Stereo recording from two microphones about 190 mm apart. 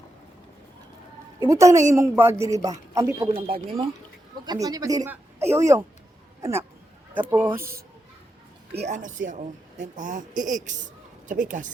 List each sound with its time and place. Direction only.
1.4 s speech: 15° right (ahead or behind)
3.3 s speech: 30° right (ahead or behind)
4.4 s speech: 20° right (ahead or behind)
8.7 s speech: 35° right (ahead or behind)